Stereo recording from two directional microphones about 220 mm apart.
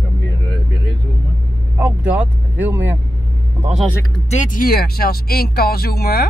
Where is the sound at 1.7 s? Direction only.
5° right (ahead or behind).